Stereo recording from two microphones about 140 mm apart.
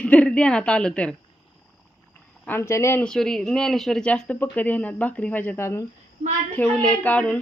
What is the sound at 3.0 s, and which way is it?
Speech, 5° left (ahead or behind).